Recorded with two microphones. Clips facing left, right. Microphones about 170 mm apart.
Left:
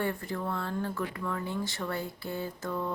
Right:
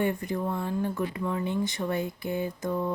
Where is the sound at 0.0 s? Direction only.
20° right (ahead or behind).